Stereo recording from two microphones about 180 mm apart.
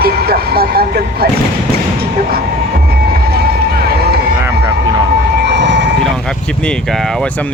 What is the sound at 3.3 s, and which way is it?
Run, 60° right (ahead or behind).